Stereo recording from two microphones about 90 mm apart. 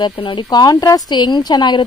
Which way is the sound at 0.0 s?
65° left (ahead or behind).